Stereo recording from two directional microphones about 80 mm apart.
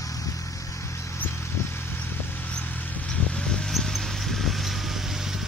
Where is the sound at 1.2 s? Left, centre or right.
Left.